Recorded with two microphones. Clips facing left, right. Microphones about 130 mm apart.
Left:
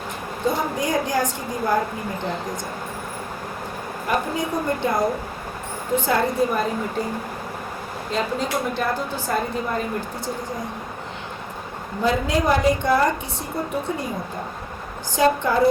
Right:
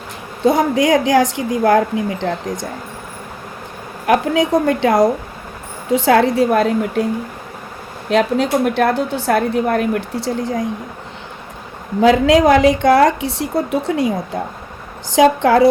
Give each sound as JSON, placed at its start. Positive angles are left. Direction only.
{"t": 0.4, "sound": "a woman's voice", "side_deg": -90}
{"t": 4.0, "sound": "a woman's voice", "side_deg": -80}
{"t": 8.1, "sound": "a woman's voice", "side_deg": -75}
{"t": 11.9, "sound": "a woman's voice", "side_deg": -90}
{"t": 15.1, "sound": "a woman's voice", "side_deg": -90}